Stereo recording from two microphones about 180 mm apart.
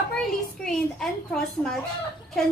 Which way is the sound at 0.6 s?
5° left (ahead or behind).